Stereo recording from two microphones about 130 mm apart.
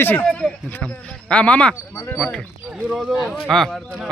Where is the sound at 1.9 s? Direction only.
25° left (ahead or behind).